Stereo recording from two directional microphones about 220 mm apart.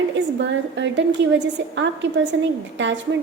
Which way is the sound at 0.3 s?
55° right (ahead or behind).